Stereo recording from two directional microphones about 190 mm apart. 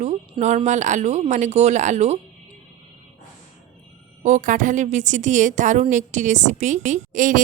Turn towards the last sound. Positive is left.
turn(degrees=-45)  # may be behind; listen again after turning